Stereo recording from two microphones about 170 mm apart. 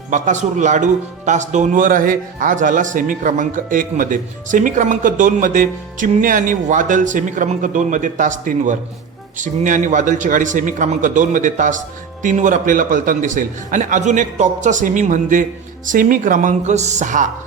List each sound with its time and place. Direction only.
0.1 s speech: 45° right (ahead or behind)